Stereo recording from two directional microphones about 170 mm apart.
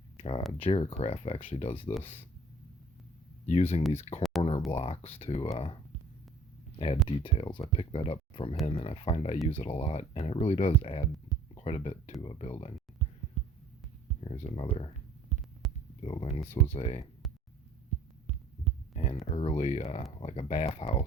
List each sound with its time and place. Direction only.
0.2 s speech: 35° left (ahead or behind)
3.4 s speech: 35° left (ahead or behind)
4.2 s a sound: centre (ahead or behind)
4.8 s speech: 35° left (ahead or behind)
14.3 s speech: 35° left (ahead or behind)
15.6 s heart sounds: centre (ahead or behind)
16.0 s speech: 35° left (ahead or behind)
18.9 s a sound: 35° left (ahead or behind)
19.3 s speech: 35° left (ahead or behind)